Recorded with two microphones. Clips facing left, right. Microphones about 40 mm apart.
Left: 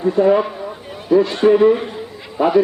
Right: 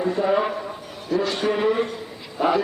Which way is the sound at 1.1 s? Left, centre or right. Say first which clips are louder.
Left 9 dB; centre.